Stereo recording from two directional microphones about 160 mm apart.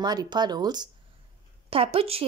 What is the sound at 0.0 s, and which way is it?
Speech, 25° right (ahead or behind).